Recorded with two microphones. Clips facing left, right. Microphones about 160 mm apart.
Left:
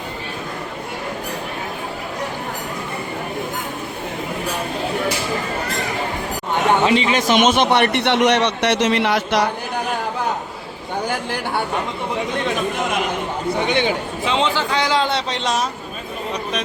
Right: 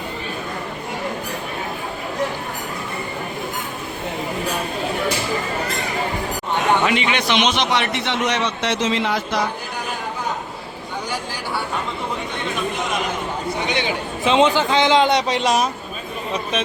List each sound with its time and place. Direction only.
6.8 s a man's voice: 35° left (ahead or behind); by 9.5 s 70° left (ahead or behind)
13.7 s speech: 50° left (ahead or behind)
14.3 s a man's voice: 20° right (ahead or behind)